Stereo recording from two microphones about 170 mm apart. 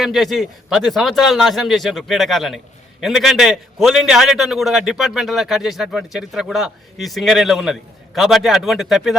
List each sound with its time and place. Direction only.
0.0 s a man's voice: centre (ahead or behind)